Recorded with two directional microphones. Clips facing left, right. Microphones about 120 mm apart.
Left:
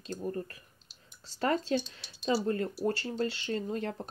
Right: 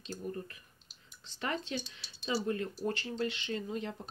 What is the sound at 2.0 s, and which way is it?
Speech, 55° left (ahead or behind).